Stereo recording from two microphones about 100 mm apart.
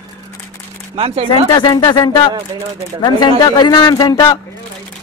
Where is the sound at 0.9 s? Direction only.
80° right.